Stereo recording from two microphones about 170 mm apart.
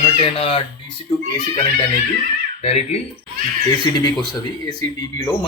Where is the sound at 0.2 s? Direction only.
35° left (ahead or behind).